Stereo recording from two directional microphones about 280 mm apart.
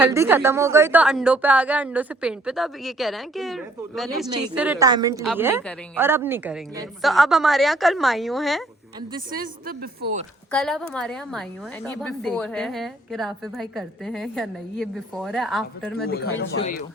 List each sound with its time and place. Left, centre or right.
0.0 s a woman's voice: centre
9.3 s a woman's voice: right
10.5 s a woman's voice: centre
16.0 s speech: left